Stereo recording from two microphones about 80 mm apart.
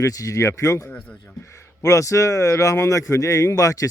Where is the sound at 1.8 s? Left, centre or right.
Left.